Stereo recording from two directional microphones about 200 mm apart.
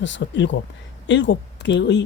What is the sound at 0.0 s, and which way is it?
Speech, 65° left (ahead or behind).